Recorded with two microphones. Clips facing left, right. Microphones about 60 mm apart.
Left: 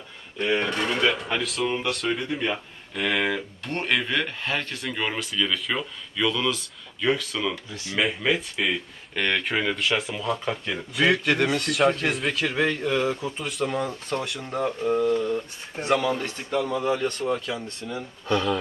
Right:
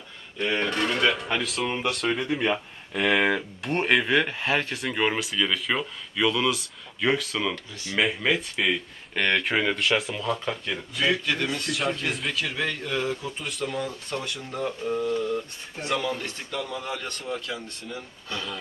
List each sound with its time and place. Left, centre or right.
0.3 s speech: centre
2.9 s speech: centre
11.1 s speech: left
12.5 s speech: centre
13.4 s speech: centre
14.5 s speech: left; by 17.6 s centre
17.8 s speech: centre